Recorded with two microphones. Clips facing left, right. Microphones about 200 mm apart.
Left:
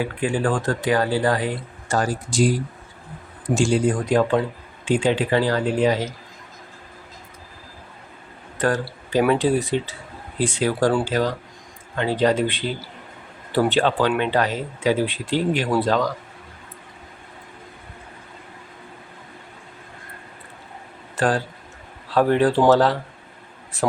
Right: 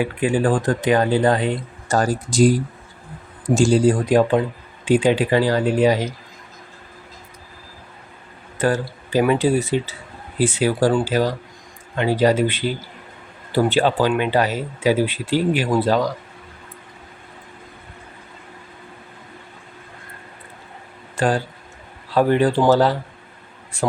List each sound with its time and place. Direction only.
0.0 s speech: 20° right (ahead or behind)
1.9 s speech: 40° right (ahead or behind)
3.5 s speech: 40° right (ahead or behind)
4.1 s speech: 20° right (ahead or behind)
8.5 s speech: centre (ahead or behind)
21.2 s a man's voice: centre (ahead or behind)